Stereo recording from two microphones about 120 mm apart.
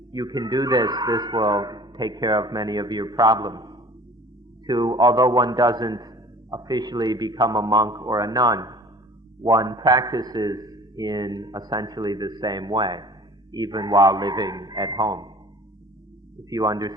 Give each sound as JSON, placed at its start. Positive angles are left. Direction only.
{"t": 0.1, "sound": "a man's voice", "side_deg": -35}
{"t": 16.5, "sound": "a man's voice", "side_deg": -35}